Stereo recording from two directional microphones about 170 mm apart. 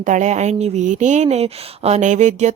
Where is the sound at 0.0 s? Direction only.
45° right (ahead or behind).